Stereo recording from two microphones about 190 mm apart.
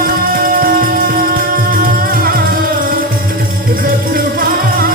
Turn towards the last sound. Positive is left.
turn(degrees=-50)  # may be behind; listen again after turning